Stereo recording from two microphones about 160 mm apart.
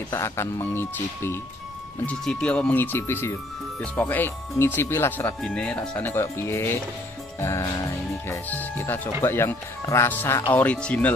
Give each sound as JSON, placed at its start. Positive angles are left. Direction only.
{"t": 0.1, "sound": "speech", "side_deg": 15}